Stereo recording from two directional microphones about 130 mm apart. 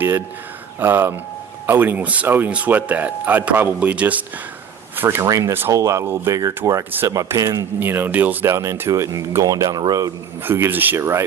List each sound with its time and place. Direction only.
0.8 s speech: 15° right (ahead or behind)
10.4 s speech: 15° right (ahead or behind)